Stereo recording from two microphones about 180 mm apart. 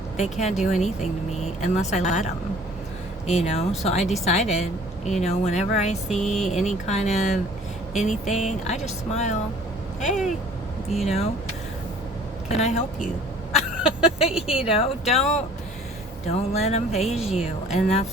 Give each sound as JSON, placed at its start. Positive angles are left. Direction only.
{"t": 0.2, "sound": "speech", "side_deg": 40}
{"t": 3.4, "sound": "speech", "side_deg": 35}
{"t": 6.2, "sound": "speech", "side_deg": 0}
{"t": 6.6, "sound": "speech", "side_deg": 40}
{"t": 11.0, "sound": "speech", "side_deg": 35}
{"t": 12.5, "sound": "speech", "side_deg": 35}
{"t": 13.5, "sound": "a sound", "side_deg": 35}
{"t": 14.3, "sound": "speech", "side_deg": -5}
{"t": 15.1, "sound": "speech", "side_deg": 40}